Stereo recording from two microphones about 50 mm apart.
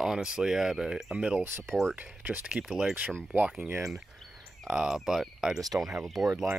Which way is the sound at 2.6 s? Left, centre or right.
Centre.